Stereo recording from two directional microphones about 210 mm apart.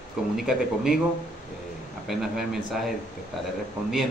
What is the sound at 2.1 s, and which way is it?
Speech, centre (ahead or behind).